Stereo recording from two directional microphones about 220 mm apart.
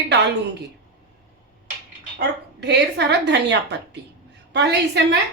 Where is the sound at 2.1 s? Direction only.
50° right (ahead or behind).